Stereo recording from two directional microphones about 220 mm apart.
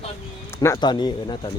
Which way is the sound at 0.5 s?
20° left (ahead or behind).